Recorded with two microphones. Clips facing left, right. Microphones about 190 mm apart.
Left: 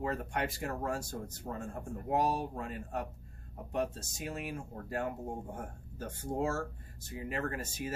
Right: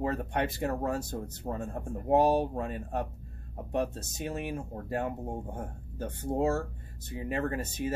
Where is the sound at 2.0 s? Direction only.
25° right (ahead or behind).